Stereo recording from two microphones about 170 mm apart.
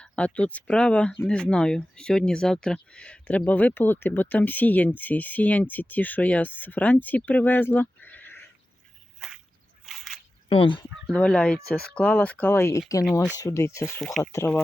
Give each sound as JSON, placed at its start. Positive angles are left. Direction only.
{"t": 0.0, "sound": "speech", "side_deg": 5}
{"t": 9.1, "sound": "a sound", "side_deg": -5}
{"t": 10.5, "sound": "speech", "side_deg": 30}
{"t": 11.0, "sound": "speech", "side_deg": 5}